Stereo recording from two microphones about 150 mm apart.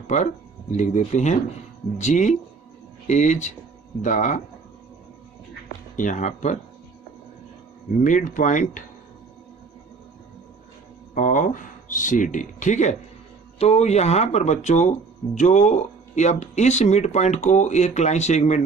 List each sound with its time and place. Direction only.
0.0 s speech: 50° left (ahead or behind)
5.9 s speech: 60° left (ahead or behind)
8.0 s speech: 60° left (ahead or behind)
11.1 s speech: 60° left (ahead or behind)